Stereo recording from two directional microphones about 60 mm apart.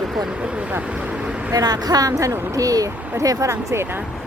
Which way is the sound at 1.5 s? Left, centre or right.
Right.